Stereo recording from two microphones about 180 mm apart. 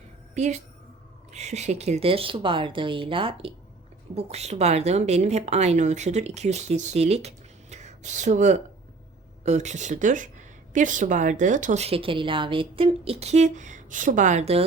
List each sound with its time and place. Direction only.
0.3 s a woman's voice: 40° right (ahead or behind)